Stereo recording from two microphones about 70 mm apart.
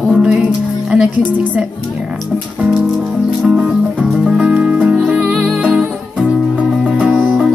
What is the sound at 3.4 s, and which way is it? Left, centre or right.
Music, centre.